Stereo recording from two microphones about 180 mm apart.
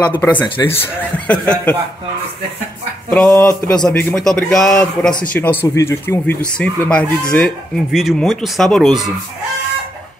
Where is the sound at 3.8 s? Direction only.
Centre (ahead or behind).